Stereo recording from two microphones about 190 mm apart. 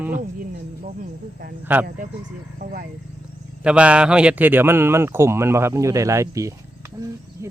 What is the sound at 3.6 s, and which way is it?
A man's voice, 5° right (ahead or behind).